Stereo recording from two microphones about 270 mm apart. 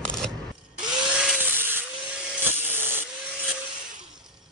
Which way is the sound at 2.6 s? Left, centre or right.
Centre.